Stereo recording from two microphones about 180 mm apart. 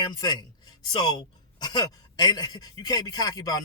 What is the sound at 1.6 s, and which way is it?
A man's voice, 20° left (ahead or behind).